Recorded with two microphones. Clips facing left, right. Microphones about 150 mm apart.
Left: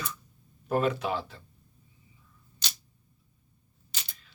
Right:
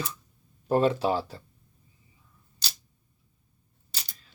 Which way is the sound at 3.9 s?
40° right (ahead or behind).